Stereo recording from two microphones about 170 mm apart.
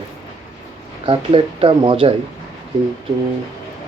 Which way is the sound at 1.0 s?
30° right (ahead or behind).